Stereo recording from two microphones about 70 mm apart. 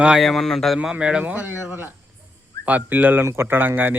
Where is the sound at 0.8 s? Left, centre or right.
Centre.